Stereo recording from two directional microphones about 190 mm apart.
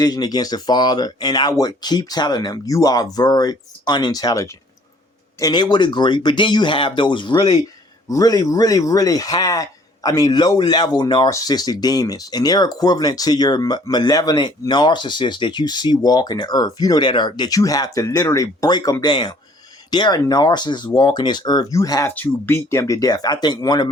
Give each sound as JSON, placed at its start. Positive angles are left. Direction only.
{"t": 0.0, "sound": "speech", "side_deg": 20}